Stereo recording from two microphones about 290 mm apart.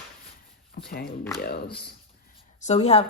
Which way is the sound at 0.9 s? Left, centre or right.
Left.